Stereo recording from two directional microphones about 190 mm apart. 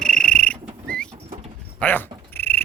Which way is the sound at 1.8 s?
10° left (ahead or behind).